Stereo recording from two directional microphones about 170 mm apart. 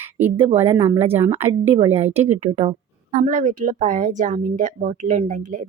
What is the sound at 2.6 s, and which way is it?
A woman's voice, 40° right (ahead or behind).